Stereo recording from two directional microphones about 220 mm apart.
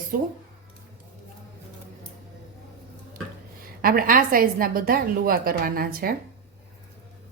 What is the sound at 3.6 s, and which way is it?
A woman's voice, 40° right (ahead or behind).